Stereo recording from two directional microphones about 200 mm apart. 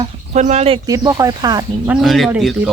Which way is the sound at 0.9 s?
15° right (ahead or behind).